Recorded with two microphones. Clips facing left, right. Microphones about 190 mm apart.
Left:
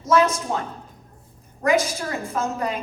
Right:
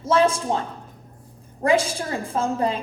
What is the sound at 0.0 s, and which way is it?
Speech, 30° right (ahead or behind).